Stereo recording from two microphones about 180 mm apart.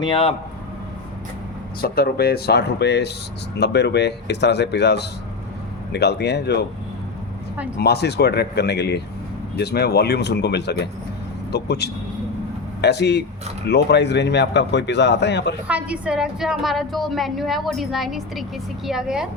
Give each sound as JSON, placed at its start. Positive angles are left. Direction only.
{"t": 0.0, "sound": "speech", "side_deg": 30}
{"t": 1.8, "sound": "a man's voice", "side_deg": 60}
{"t": 7.8, "sound": "a man's voice", "side_deg": 65}
{"t": 15.6, "sound": "a woman's voice", "side_deg": -5}